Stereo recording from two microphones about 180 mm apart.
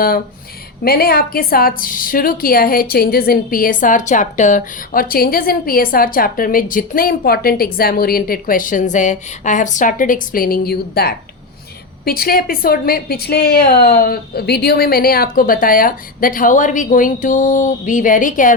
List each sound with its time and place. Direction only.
0.9 s a woman's voice: 60° left (ahead or behind)